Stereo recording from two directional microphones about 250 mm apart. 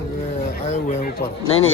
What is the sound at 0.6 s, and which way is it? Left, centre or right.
Speech, left.